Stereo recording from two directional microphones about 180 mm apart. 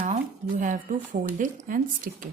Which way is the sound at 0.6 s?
45° right (ahead or behind).